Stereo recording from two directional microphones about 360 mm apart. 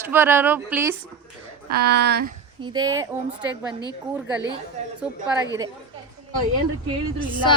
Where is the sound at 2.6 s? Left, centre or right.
Centre.